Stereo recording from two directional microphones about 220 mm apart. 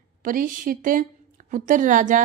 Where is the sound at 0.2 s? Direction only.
35° right (ahead or behind).